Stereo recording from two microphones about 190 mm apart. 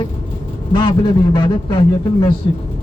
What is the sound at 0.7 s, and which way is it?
A man's voice, 25° left (ahead or behind).